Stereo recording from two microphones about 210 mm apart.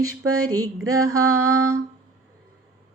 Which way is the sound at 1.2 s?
15° right (ahead or behind).